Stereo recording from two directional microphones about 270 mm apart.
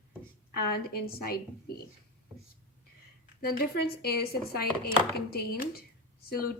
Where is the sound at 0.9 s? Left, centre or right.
Left.